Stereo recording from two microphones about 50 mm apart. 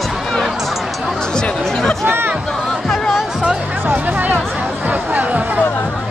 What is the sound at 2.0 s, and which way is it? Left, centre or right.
Music, right.